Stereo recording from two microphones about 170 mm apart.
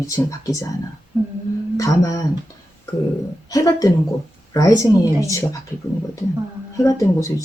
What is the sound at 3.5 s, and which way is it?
Speech, 20° left (ahead or behind).